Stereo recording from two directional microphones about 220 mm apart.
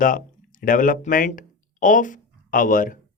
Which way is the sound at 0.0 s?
40° left (ahead or behind).